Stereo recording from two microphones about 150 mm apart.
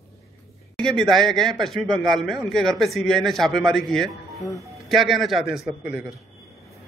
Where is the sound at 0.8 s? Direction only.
5° left (ahead or behind).